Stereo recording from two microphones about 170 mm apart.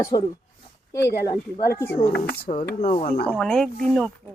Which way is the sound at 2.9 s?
45° left (ahead or behind).